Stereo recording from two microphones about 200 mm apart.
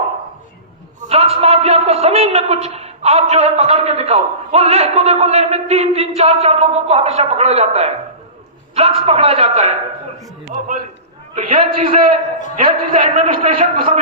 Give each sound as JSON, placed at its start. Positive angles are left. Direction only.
{"t": 1.0, "sound": "a man's voice", "side_deg": -30}
{"t": 11.3, "sound": "a man's voice", "side_deg": -30}